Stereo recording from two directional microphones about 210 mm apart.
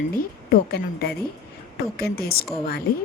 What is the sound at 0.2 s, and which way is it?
Speech, 45° left (ahead or behind).